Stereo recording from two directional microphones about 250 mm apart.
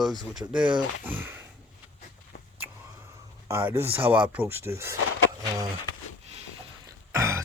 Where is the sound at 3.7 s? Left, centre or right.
Right.